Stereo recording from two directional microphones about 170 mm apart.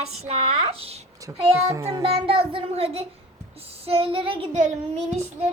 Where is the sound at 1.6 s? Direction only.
20° right (ahead or behind).